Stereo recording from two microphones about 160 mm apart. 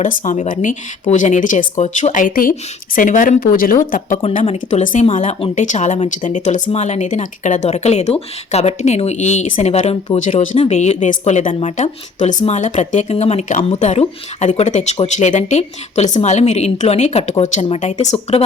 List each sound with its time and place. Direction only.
0.0 s speech: 50° left (ahead or behind)